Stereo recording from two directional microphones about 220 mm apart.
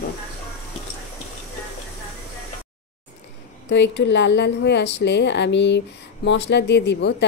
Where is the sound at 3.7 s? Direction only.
55° left (ahead or behind).